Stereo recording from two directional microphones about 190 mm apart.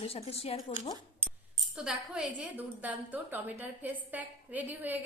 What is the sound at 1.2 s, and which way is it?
Speech, 5° right (ahead or behind).